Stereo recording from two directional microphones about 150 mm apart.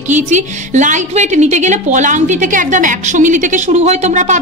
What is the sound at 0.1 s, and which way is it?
A woman's voice, 50° right (ahead or behind).